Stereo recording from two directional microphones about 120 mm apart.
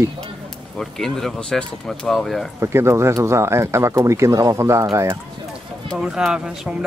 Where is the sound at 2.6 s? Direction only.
20° right (ahead or behind).